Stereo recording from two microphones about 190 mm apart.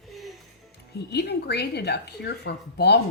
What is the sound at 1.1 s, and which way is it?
Speech, 60° left (ahead or behind).